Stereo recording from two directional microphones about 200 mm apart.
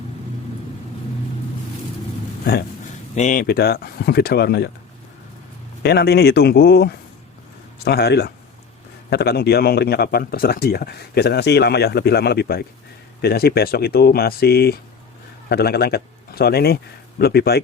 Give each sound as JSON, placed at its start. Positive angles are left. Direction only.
{"t": 2.4, "sound": "a man's voice", "side_deg": 50}
{"t": 5.8, "sound": "a man's voice", "side_deg": 55}